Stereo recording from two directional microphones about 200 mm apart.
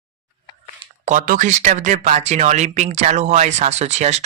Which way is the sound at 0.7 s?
35° right (ahead or behind).